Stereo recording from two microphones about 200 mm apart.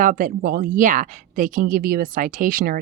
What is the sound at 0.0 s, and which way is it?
Speech, 40° right (ahead or behind).